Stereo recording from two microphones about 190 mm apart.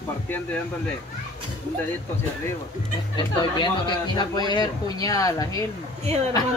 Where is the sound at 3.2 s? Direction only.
25° left (ahead or behind).